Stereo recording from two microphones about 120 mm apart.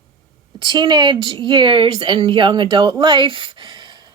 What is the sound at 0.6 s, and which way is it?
A woman's voice, 40° right (ahead or behind).